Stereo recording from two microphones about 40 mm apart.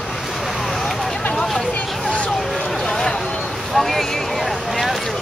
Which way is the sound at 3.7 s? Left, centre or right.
Centre.